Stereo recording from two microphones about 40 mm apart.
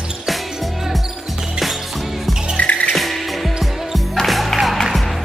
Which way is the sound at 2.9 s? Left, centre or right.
Centre.